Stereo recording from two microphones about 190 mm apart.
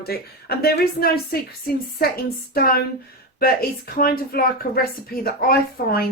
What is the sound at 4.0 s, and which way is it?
Speech, 50° left (ahead or behind).